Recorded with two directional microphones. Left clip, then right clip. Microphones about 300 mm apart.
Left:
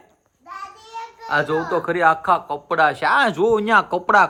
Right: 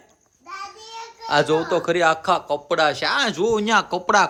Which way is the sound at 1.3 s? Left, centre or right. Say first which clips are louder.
Right 1 dB; centre.